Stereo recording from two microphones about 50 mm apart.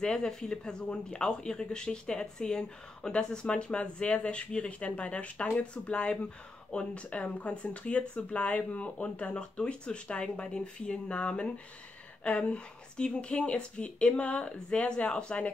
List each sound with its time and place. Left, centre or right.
0.0 s speech: centre